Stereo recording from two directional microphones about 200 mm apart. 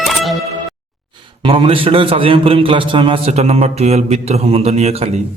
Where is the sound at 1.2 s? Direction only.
25° right (ahead or behind).